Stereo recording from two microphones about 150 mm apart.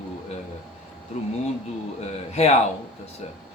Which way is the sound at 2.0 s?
45° left (ahead or behind).